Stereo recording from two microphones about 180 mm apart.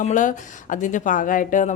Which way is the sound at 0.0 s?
45° left (ahead or behind).